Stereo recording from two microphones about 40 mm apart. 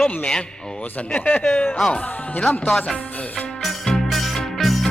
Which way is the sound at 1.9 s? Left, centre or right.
Left.